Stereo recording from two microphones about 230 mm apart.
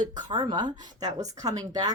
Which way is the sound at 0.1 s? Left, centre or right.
Centre.